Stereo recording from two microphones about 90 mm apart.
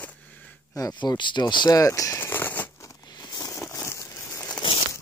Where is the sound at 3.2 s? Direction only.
50° left (ahead or behind).